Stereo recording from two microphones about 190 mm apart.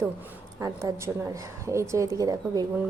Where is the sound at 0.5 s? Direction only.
15° right (ahead or behind).